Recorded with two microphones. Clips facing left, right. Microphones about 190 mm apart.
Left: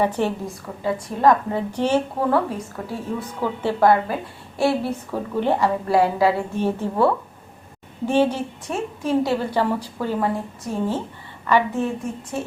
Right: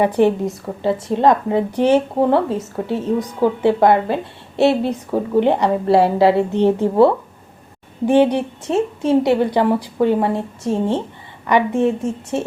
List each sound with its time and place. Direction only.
0.0 s a woman's voice: 15° right (ahead or behind)
12.3 s speech: 25° right (ahead or behind)